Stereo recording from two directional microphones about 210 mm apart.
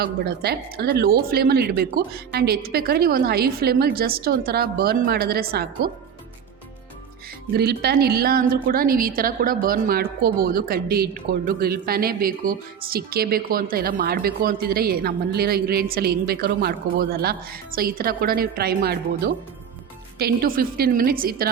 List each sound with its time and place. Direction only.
0.0 s a woman's voice: 50° right (ahead or behind)
7.5 s a woman's voice: 50° right (ahead or behind)